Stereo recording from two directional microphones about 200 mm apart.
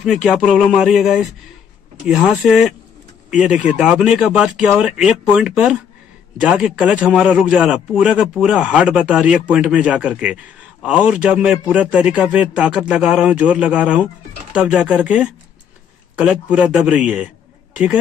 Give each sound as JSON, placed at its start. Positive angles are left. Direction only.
{"t": 0.0, "sound": "a man's voice", "side_deg": 0}